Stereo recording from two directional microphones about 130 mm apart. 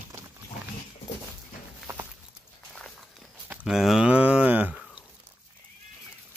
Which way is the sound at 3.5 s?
10° right (ahead or behind).